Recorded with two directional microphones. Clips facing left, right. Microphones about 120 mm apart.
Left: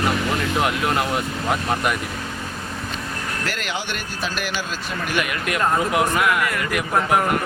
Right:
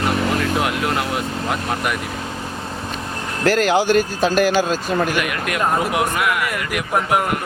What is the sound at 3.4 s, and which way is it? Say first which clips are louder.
Speech: right 16 dB; 40° right (ahead or behind).